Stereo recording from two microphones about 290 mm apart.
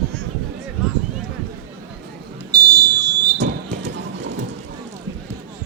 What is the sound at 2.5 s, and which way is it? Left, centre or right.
Fire alarm, centre.